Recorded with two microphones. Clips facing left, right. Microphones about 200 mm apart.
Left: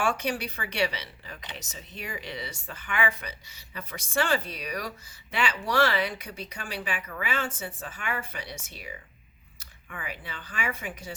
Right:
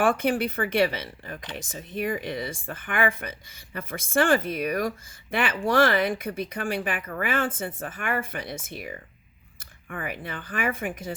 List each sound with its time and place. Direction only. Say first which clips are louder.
0.0 s speech: right 6 dB; 50° right (ahead or behind)